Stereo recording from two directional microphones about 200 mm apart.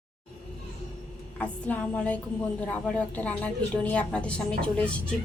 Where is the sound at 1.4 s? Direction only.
5° left (ahead or behind).